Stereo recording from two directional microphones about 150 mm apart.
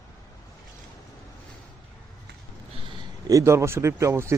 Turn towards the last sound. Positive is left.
turn(degrees=-20)  # may be behind; listen again after turning